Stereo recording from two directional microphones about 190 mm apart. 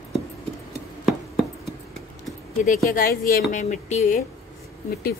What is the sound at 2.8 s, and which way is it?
A woman's voice, 45° left (ahead or behind).